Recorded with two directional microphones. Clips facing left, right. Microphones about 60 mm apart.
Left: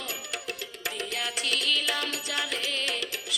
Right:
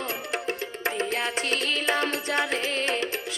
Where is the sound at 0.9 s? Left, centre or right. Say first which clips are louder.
Right 6 dB; right.